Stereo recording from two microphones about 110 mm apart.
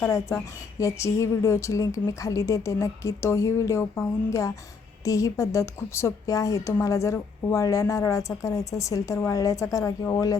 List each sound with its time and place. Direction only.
0.8 s a woman's voice: 30° left (ahead or behind)